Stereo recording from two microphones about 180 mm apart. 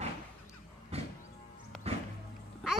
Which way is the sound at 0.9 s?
35° right (ahead or behind).